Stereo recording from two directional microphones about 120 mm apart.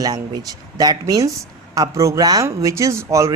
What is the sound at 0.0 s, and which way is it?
A woman's voice, 30° right (ahead or behind).